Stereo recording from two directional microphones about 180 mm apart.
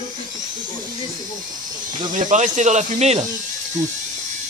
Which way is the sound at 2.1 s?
45° right (ahead or behind).